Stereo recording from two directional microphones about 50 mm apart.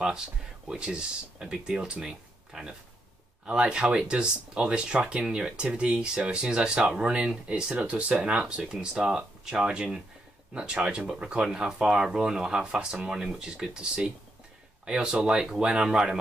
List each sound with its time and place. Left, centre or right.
0.0 s speech: centre